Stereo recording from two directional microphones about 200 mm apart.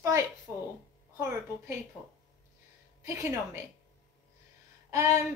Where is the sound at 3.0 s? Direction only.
15° right (ahead or behind).